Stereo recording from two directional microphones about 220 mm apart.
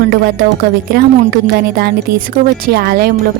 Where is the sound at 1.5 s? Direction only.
45° right (ahead or behind).